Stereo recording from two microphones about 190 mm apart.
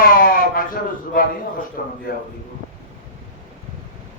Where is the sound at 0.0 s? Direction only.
45° left (ahead or behind).